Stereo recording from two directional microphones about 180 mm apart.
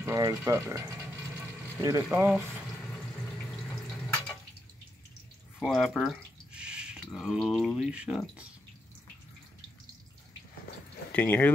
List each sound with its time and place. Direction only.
0.0 s speech: 15° right (ahead or behind)
2.0 s speech: 5° right (ahead or behind)
5.6 s speech: centre (ahead or behind)
11.1 s speech: 10° left (ahead or behind)